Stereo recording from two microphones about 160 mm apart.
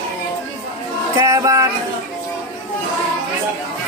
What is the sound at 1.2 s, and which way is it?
Music, 20° right (ahead or behind).